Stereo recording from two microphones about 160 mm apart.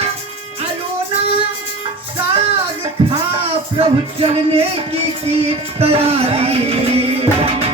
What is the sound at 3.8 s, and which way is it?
Music, 35° right (ahead or behind).